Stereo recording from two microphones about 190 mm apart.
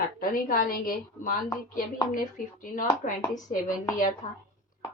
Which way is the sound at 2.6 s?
45° left (ahead or behind).